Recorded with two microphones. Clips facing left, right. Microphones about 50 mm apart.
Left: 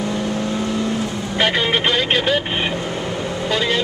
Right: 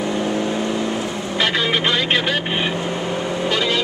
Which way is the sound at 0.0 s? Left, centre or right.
Centre.